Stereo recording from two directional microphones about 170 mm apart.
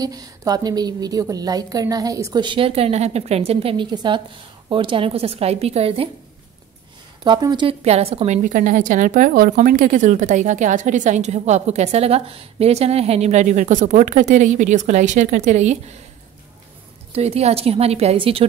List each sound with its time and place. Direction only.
0.0 s a woman's voice: 20° right (ahead or behind)
7.2 s a woman's voice: 25° right (ahead or behind)
7.8 s a woman's voice: 40° right (ahead or behind)
8.4 s a woman's voice: 50° right (ahead or behind)
17.1 s a woman's voice: 35° right (ahead or behind)